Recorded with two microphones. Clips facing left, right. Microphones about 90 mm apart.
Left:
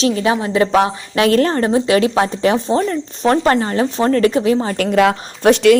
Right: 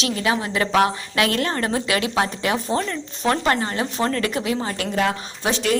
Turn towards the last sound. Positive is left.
turn(degrees=75)  # may be behind; listen again after turning